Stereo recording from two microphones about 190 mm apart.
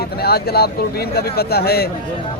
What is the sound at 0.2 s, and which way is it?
Speech, 55° left (ahead or behind).